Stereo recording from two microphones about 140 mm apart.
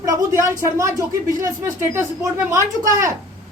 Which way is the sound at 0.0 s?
20° right (ahead or behind).